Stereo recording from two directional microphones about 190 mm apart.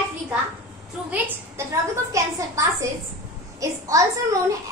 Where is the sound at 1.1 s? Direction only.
10° right (ahead or behind).